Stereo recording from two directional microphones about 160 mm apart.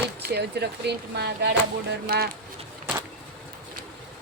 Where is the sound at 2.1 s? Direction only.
75° right (ahead or behind).